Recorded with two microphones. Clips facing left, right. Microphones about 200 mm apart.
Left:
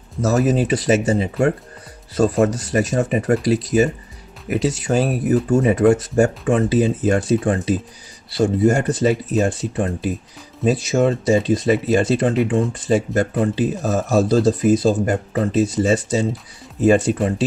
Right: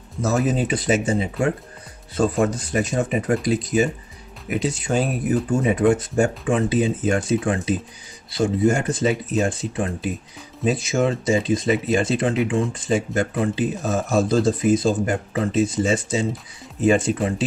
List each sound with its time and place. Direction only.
0.2 s speech: 40° left (ahead or behind)